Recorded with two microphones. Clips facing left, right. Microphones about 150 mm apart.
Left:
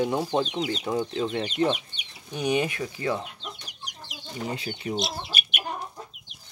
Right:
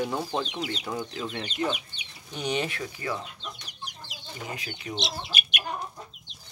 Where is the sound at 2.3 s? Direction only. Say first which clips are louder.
Left 4 dB; 15° left (ahead or behind).